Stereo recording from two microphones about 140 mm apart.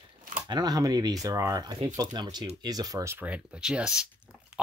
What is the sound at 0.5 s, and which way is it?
Speech, 30° right (ahead or behind).